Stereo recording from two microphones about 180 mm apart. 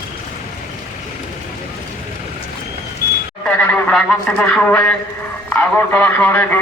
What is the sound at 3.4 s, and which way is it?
A man's voice, 10° left (ahead or behind).